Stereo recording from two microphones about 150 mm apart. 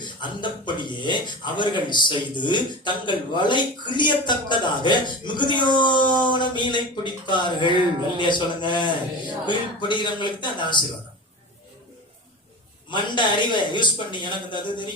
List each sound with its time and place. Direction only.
0.0 s speech: 30° left (ahead or behind)
12.9 s speech: 30° left (ahead or behind)